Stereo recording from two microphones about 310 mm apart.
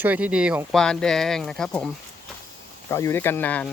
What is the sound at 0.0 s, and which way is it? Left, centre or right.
Speech, centre.